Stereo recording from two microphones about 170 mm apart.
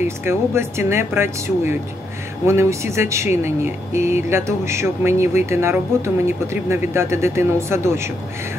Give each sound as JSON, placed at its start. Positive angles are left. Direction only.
{"t": 0.0, "sound": "speech", "side_deg": -15}